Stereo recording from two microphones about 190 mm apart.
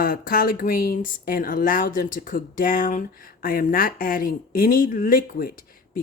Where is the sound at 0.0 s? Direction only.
50° left (ahead or behind).